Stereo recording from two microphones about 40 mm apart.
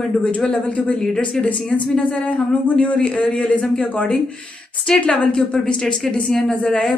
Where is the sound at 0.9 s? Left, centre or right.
Centre.